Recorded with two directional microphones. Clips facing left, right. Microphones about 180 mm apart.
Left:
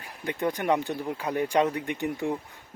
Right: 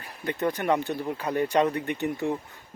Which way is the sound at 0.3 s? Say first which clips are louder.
Right 1 dB; 15° left (ahead or behind).